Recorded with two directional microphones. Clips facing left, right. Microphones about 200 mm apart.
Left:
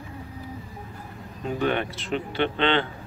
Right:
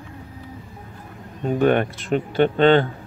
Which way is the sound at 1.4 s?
50° right (ahead or behind).